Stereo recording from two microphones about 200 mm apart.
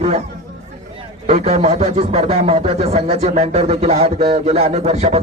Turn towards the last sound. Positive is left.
turn(degrees=-35)  # may be behind; listen again after turning